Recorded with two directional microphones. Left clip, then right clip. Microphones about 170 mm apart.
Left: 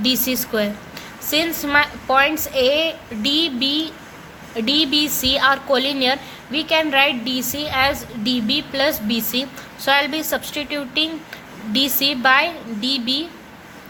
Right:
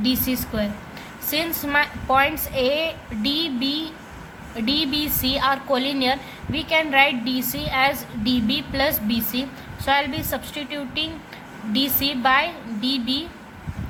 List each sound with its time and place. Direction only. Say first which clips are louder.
0.0 s a woman's voice: left 4 dB; 25° left (ahead or behind)